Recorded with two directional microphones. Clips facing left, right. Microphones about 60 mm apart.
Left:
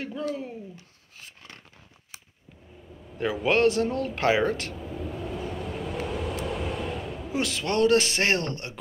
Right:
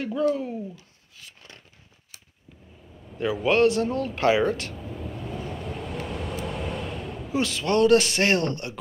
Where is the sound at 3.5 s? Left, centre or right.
Left.